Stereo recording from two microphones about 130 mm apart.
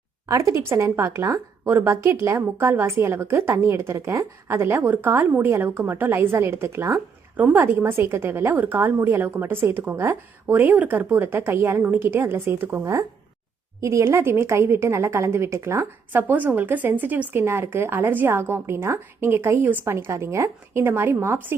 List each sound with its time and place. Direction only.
0.3 s a woman's voice: 25° right (ahead or behind)